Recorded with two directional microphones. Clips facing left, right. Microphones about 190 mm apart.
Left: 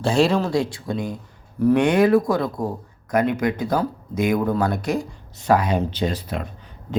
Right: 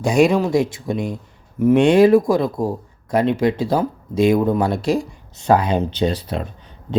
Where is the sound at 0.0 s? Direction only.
15° right (ahead or behind).